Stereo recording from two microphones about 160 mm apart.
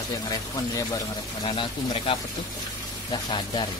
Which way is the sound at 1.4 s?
35° left (ahead or behind).